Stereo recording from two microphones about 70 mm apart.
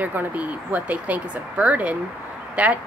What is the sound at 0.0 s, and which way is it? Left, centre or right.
Speech, right.